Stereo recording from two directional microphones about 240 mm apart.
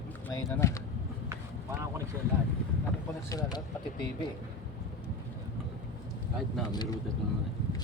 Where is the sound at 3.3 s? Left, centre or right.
Centre.